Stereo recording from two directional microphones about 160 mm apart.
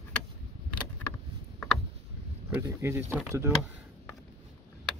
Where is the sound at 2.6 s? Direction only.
15° right (ahead or behind).